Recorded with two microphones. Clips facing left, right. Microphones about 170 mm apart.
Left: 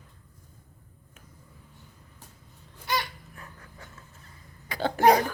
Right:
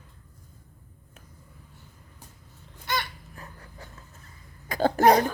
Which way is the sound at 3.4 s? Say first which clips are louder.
Right 3 dB; 35° right (ahead or behind).